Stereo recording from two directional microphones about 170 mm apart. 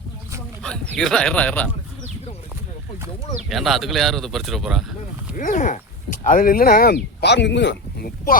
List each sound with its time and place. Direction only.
0.9 s speech: 5° left (ahead or behind)
3.5 s speech: centre (ahead or behind)
5.4 s speech: 50° left (ahead or behind)